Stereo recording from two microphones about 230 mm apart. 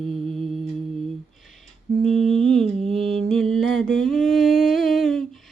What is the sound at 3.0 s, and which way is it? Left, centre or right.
Humming, right.